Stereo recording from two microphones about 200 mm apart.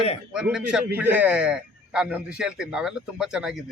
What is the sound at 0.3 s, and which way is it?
A man's voice, 5° right (ahead or behind).